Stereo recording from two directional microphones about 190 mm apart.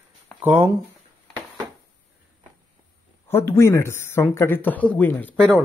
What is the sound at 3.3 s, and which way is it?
Speech, 15° left (ahead or behind).